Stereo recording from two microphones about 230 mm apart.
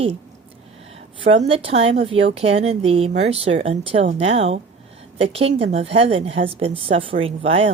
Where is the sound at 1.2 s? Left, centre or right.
Right.